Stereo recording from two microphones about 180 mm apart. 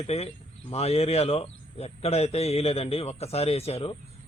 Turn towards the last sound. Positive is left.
turn(degrees=35)  # may be behind; listen again after turning